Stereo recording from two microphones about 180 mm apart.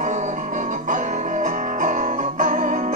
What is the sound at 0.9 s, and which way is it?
Music, 45° right (ahead or behind).